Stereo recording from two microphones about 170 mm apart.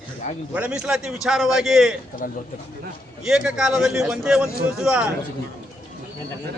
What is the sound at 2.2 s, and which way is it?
Speech, 55° left (ahead or behind).